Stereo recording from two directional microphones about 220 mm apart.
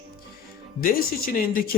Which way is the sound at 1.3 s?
40° left (ahead or behind).